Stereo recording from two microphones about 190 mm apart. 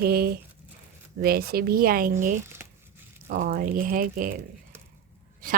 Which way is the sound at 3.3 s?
50° right (ahead or behind).